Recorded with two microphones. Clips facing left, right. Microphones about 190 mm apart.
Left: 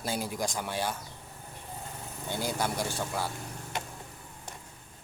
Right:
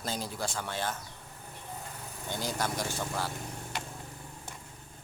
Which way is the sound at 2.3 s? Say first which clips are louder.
Left 2 dB; 10° left (ahead or behind).